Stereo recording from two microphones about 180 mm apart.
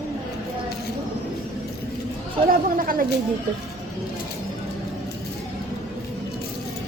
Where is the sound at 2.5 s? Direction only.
50° right (ahead or behind).